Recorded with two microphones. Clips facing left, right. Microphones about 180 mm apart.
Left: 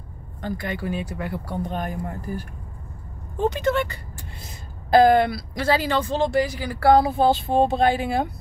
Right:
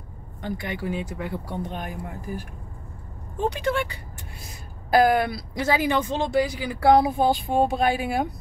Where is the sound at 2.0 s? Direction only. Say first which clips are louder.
Left 3 dB; 10° right (ahead or behind).